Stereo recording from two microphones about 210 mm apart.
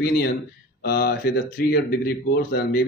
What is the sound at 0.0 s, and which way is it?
Speech, 45° left (ahead or behind).